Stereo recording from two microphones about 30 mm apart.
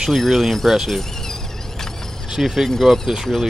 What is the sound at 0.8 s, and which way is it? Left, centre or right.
Insect, centre.